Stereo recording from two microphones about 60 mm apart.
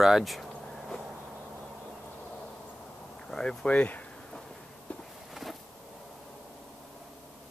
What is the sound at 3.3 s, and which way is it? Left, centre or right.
Speech, centre.